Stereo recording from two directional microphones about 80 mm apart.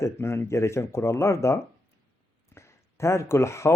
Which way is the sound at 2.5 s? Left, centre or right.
Left.